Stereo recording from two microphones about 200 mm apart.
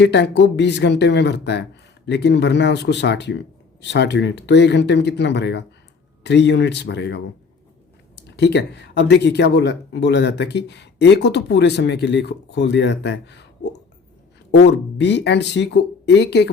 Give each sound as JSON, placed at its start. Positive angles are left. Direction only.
{"t": 0.0, "sound": "speech", "side_deg": 60}